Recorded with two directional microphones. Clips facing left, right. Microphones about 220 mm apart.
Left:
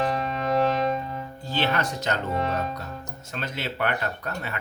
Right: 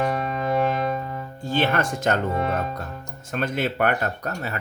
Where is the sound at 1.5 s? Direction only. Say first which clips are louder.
Right 4 dB; 50° right (ahead or behind).